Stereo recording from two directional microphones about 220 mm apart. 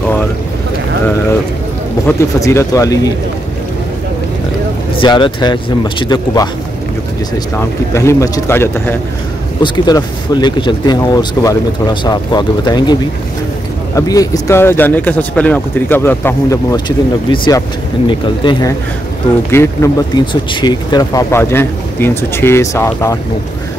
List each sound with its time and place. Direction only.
2.0 s speech: 15° left (ahead or behind)
5.0 s speech: 20° left (ahead or behind)
7.5 s speech: 10° left (ahead or behind)
13.9 s speech: 15° left (ahead or behind)